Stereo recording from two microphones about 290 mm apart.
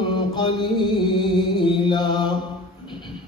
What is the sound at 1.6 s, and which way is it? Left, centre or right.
Mantra, centre.